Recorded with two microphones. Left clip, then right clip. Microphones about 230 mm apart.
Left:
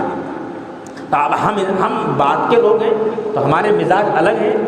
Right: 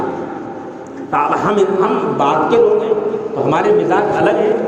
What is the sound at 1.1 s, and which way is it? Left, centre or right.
A man's voice, left.